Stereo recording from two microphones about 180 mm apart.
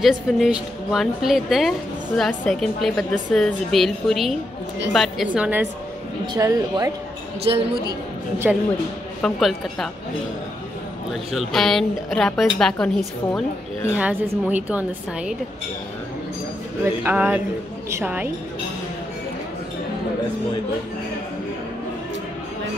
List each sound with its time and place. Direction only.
0.0 s a woman's voice: centre (ahead or behind)
8.5 s a woman's voice: centre (ahead or behind)
11.1 s a woman's voice: centre (ahead or behind)
13.9 s a woman's voice: 10° right (ahead or behind)
16.8 s a woman's voice: 10° right (ahead or behind)